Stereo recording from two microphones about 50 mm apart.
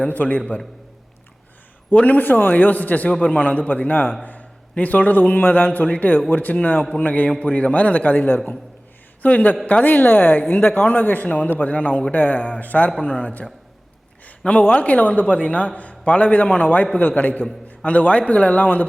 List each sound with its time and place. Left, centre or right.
0.1 s a man's voice: left
1.9 s a man's voice: left
3.1 s a man's voice: left
14.3 s a sound: left
14.7 s a man's voice: left